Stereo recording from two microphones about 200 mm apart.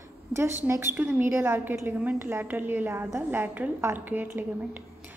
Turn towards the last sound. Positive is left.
turn(degrees=-10)  # may be behind; listen again after turning